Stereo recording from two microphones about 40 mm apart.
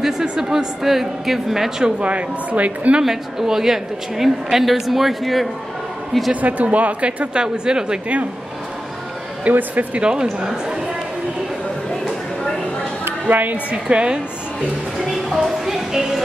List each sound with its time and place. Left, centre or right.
0.2 s speech: centre
2.0 s speech: right
3.0 s speech: centre
6.4 s a woman's voice: right
9.5 s a woman's voice: right
9.9 s a woman's voice: right
13.3 s a woman's voice: right
13.8 s a woman's voice: right
15.0 s speech: centre